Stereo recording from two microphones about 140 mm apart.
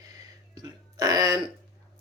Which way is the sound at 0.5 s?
30° right (ahead or behind).